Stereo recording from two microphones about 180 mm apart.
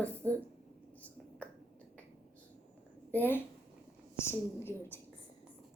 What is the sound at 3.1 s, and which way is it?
A woman's voice, 10° left (ahead or behind).